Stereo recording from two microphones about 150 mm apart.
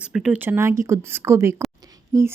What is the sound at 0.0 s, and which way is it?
Speech, 5° right (ahead or behind).